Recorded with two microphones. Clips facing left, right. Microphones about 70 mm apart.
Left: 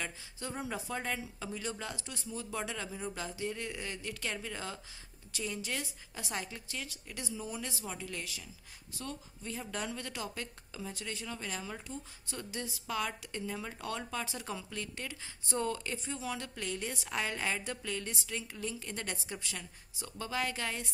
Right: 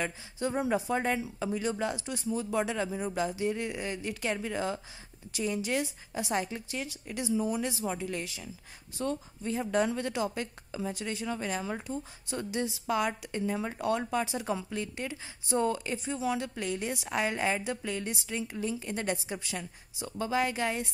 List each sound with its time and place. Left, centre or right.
0.0 s speech: right